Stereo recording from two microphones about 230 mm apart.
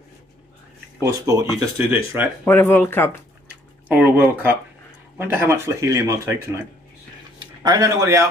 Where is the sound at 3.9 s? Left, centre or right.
Centre.